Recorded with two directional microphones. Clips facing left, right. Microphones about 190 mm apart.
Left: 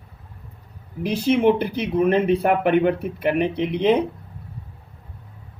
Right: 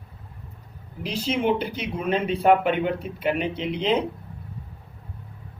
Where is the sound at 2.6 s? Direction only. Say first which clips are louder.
Left 6 dB; 60° left (ahead or behind).